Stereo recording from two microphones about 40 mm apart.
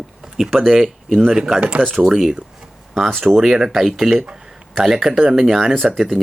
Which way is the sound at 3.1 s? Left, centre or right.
Centre.